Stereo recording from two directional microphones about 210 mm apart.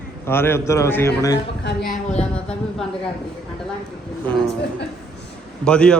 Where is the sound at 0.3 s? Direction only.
10° left (ahead or behind).